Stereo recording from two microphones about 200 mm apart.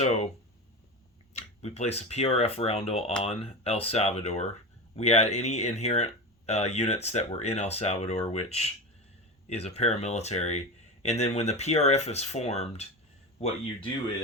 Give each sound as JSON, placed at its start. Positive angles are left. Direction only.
{"t": 0.0, "sound": "speech", "side_deg": 35}
{"t": 1.3, "sound": "speech", "side_deg": 30}